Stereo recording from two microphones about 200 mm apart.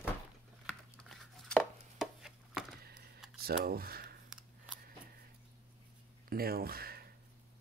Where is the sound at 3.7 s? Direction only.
50° right (ahead or behind).